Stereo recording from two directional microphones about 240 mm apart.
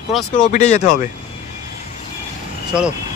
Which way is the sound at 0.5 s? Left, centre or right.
Left.